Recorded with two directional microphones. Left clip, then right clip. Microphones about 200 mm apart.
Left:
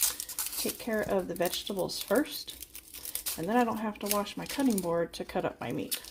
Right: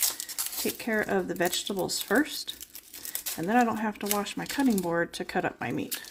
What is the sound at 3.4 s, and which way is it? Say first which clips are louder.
Speech: right 3 dB; 25° right (ahead or behind).